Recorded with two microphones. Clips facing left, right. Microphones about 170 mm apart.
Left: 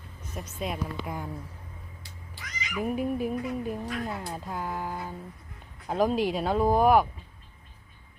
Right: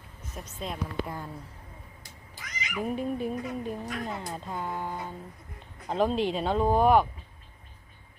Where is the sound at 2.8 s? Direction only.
10° left (ahead or behind).